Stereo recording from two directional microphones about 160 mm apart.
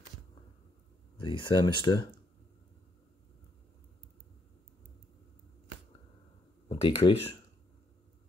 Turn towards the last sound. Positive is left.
turn(degrees=35)  # may be behind; listen again after turning